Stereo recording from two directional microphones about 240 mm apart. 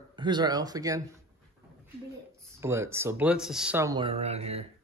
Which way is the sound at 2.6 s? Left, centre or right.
Centre.